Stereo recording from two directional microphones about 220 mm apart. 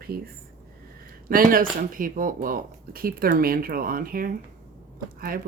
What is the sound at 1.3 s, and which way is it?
Speech, 40° right (ahead or behind).